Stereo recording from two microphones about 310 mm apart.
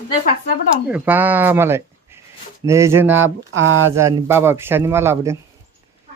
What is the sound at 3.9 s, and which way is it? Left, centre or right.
Speech, centre.